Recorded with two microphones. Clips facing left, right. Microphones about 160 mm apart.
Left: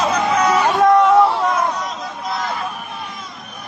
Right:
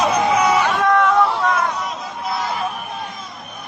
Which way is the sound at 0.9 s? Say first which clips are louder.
Left 4 dB; 20° left (ahead or behind).